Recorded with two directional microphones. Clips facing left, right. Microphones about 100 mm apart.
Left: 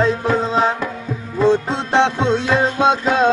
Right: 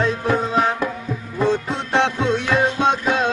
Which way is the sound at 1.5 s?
25° left (ahead or behind).